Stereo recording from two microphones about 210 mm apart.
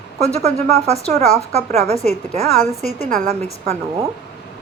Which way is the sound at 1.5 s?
30° right (ahead or behind).